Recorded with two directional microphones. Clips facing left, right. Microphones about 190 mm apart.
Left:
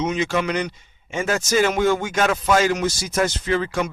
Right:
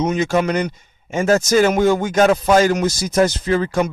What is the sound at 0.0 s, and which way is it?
Speech, 45° right (ahead or behind).